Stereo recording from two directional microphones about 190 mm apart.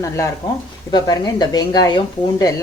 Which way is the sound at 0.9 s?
20° left (ahead or behind).